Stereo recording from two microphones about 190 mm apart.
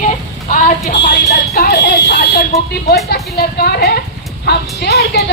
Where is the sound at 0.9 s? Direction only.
65° left (ahead or behind).